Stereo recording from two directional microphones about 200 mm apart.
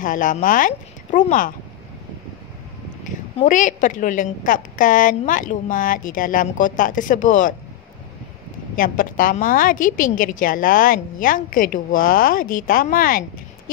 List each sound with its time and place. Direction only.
0.0 s a woman's voice: 40° left (ahead or behind)
3.4 s a woman's voice: 40° left (ahead or behind)
8.7 s a woman's voice: 45° left (ahead or behind)